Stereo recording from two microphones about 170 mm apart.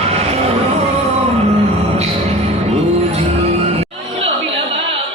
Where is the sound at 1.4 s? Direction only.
40° right (ahead or behind).